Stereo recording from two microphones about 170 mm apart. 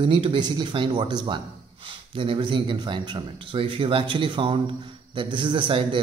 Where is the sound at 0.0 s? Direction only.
30° right (ahead or behind).